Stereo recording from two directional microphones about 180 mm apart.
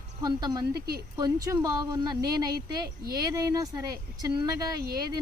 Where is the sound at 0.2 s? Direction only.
20° right (ahead or behind).